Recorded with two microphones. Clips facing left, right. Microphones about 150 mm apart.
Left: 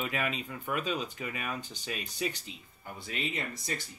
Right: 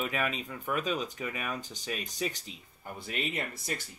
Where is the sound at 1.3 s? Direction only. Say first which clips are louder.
Right 1 dB; 40° right (ahead or behind).